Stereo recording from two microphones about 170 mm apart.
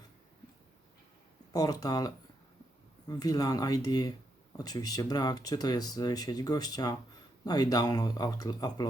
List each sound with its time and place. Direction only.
1.5 s speech: 20° left (ahead or behind)